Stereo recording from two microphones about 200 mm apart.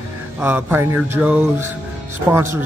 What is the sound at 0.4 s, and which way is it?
Mantra, 10° right (ahead or behind).